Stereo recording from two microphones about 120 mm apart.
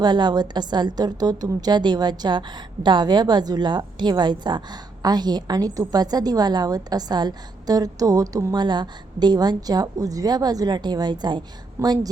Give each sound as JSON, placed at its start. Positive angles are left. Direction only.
{"t": 0.0, "sound": "a woman's voice", "side_deg": -40}
{"t": 8.6, "sound": "a woman's voice", "side_deg": -40}